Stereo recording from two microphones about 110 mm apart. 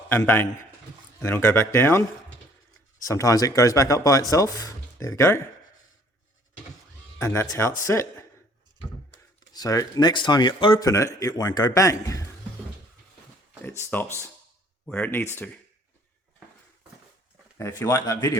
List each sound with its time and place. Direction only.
0.1 s a man's voice: 20° left (ahead or behind)
7.2 s a man's voice: 25° left (ahead or behind)
9.5 s speech: 35° left (ahead or behind)
10.8 s speech: 30° left (ahead or behind)
13.7 s a man's voice: 20° left (ahead or behind)
17.6 s speech: 25° left (ahead or behind)